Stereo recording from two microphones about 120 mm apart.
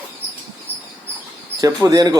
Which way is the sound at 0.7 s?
15° right (ahead or behind).